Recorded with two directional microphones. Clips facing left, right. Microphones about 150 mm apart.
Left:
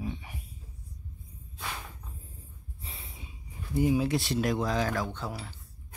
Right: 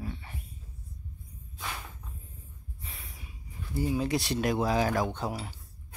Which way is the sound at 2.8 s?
30° left (ahead or behind).